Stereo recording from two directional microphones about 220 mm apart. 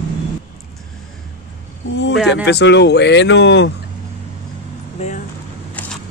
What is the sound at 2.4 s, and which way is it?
Speech, 50° left (ahead or behind).